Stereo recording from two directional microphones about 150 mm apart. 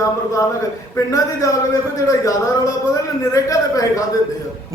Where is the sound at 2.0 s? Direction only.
20° left (ahead or behind).